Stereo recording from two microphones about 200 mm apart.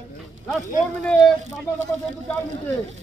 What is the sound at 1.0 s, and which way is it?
Speech, 5° left (ahead or behind).